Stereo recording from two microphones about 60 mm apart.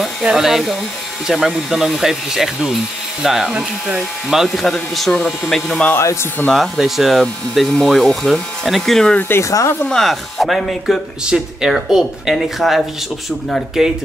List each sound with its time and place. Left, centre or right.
0.0 s speech: centre
4.6 s speech: centre
9.4 s speech: left
9.8 s speech: centre